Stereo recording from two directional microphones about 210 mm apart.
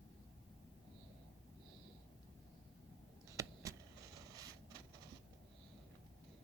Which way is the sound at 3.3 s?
15° right (ahead or behind).